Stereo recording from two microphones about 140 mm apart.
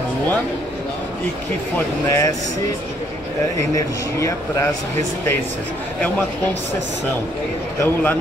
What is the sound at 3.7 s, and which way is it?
Speech, 25° left (ahead or behind).